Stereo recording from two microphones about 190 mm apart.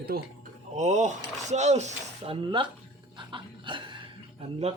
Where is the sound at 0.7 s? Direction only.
40° right (ahead or behind).